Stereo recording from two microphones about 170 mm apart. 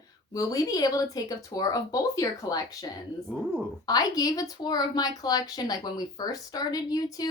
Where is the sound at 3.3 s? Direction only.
5° right (ahead or behind).